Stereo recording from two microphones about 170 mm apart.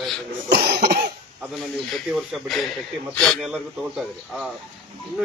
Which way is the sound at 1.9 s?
Centre (ahead or behind).